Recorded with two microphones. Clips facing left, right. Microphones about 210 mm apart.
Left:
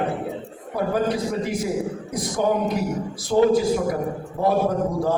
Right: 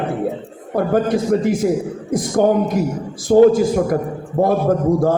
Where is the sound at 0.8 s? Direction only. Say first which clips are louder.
Right 6 dB; 50° right (ahead or behind).